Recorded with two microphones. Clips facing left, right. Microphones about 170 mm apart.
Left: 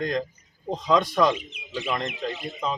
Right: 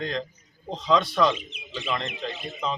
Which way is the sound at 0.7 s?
10° left (ahead or behind).